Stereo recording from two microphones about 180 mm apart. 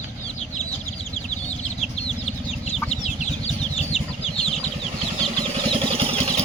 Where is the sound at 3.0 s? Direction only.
40° left (ahead or behind).